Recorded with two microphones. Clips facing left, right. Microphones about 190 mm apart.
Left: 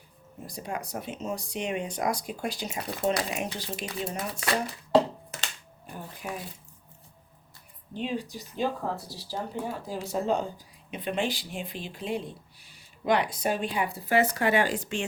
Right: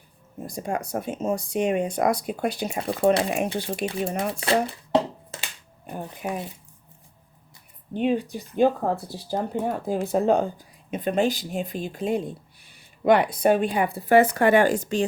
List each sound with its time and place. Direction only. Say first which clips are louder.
0.4 s speech: right 6 dB; 50° right (ahead or behind)
2.7 s speech: right 7 dB; 30° right (ahead or behind)
3.2 s speech: right 7 dB; 55° right (ahead or behind)
4.3 s speech: right 7 dB; 25° right (ahead or behind)
5.8 s speech: right 7 dB; 55° right (ahead or behind)
7.9 s speech: right 8 dB; 60° right (ahead or behind)
10.9 s speech: right 7 dB; 45° right (ahead or behind)